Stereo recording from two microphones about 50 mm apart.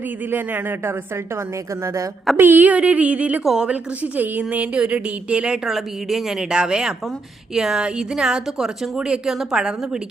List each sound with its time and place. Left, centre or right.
0.3 s a man's voice: right
1.8 s a woman's voice: right
2.3 s speech: right
3.4 s speech: centre
4.0 s a woman's voice: right
5.6 s speech: centre
6.5 s speech: centre